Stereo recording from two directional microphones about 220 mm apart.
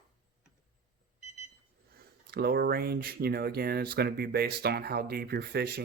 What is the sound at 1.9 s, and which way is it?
Speech, 45° right (ahead or behind).